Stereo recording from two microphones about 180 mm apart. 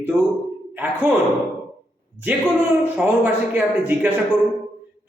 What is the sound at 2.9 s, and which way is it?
A man's voice, 10° right (ahead or behind).